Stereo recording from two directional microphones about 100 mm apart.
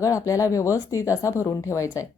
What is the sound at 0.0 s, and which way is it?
A woman's voice, 35° left (ahead or behind).